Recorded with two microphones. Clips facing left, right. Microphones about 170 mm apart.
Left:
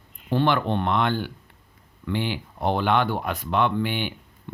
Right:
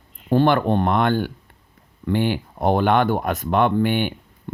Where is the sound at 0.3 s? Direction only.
50° right (ahead or behind).